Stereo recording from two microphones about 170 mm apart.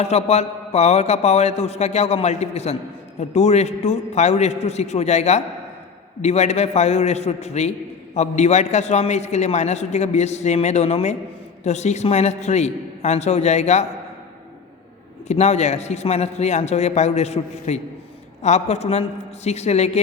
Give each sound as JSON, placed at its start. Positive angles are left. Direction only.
{"t": 0.0, "sound": "a man's voice", "side_deg": 40}
{"t": 15.3, "sound": "a man's voice", "side_deg": 40}